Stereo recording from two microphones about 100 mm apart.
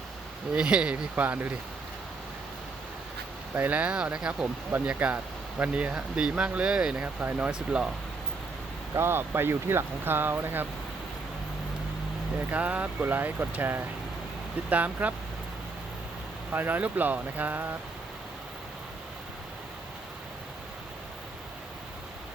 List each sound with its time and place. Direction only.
0.5 s speech: 10° right (ahead or behind)
3.5 s speech: 15° right (ahead or behind)
9.0 s speech: 25° right (ahead or behind)
12.5 s speech: 15° right (ahead or behind)
16.5 s speech: 20° right (ahead or behind)